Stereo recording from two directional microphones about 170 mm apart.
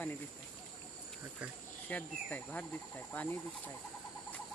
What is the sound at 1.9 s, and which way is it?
Speech, 10° left (ahead or behind).